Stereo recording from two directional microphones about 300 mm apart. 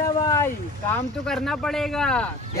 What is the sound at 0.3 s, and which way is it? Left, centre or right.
Speech, centre.